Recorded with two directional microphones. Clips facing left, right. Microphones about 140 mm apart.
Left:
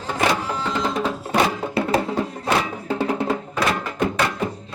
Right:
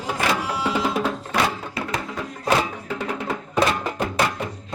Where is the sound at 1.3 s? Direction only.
30° left (ahead or behind).